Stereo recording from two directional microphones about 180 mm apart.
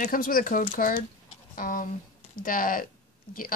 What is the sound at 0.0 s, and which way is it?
Speech, 50° left (ahead or behind).